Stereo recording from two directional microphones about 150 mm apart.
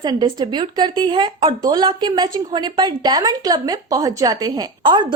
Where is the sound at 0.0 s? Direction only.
30° right (ahead or behind).